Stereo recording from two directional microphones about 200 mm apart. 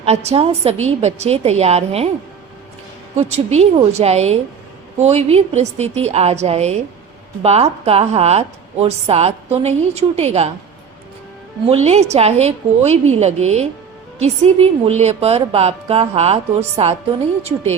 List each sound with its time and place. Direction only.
0.0 s a woman's voice: 30° right (ahead or behind)
3.2 s a woman's voice: 35° right (ahead or behind)
11.6 s a woman's voice: 30° right (ahead or behind)